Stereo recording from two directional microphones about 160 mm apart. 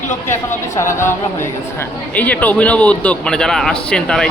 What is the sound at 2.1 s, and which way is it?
A woman's voice, 10° left (ahead or behind).